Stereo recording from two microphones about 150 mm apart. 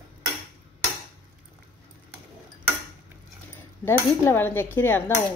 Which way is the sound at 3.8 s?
15° left (ahead or behind).